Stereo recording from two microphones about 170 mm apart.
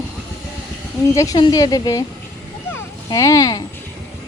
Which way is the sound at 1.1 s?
20° left (ahead or behind).